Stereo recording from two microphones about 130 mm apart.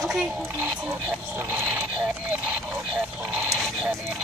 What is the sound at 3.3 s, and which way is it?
Speech, 5° right (ahead or behind).